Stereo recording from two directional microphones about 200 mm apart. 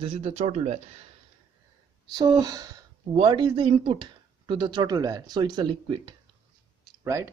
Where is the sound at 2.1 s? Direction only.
20° right (ahead or behind).